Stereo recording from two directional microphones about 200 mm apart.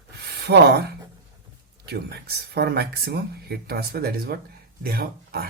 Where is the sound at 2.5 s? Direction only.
55° right (ahead or behind).